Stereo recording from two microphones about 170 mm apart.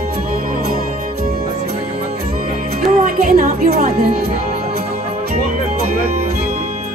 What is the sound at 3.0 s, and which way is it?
Music, 55° right (ahead or behind).